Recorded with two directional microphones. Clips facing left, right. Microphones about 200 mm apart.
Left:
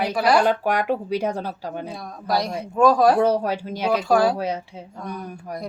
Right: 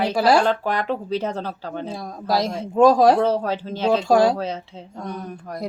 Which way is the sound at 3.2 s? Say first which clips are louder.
Left 1 dB; 15° left (ahead or behind).